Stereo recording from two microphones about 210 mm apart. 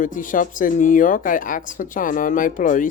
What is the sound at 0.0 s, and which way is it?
Speech, 40° left (ahead or behind).